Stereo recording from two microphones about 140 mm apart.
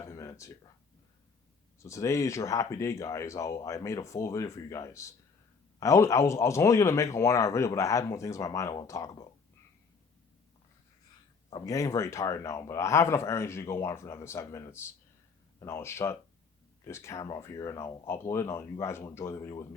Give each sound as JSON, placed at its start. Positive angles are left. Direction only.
{"t": 0.0, "sound": "a sound", "side_deg": 20}
{"t": 1.8, "sound": "speech", "side_deg": 20}
{"t": 11.6, "sound": "speech", "side_deg": 25}